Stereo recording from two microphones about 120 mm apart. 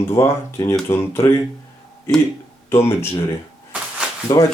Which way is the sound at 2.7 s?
20° left (ahead or behind).